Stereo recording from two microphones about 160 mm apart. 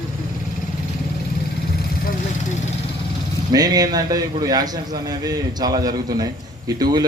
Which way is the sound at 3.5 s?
25° right (ahead or behind).